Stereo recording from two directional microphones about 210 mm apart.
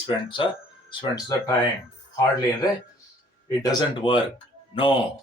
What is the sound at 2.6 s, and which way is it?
Speech, 20° left (ahead or behind).